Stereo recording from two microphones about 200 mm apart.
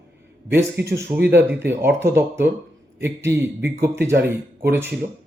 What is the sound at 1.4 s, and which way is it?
A man's voice, 10° right (ahead or behind).